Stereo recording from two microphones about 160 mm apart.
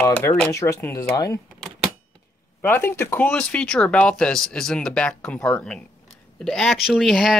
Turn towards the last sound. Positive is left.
turn(degrees=0)  # may be behind; listen again after turning